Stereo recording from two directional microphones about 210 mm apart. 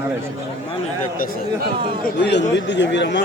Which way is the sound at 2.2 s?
55° left (ahead or behind).